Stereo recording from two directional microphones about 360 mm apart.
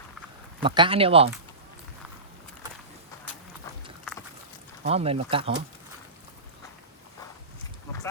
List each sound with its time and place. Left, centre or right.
0.6 s speech: centre
4.8 s speech: centre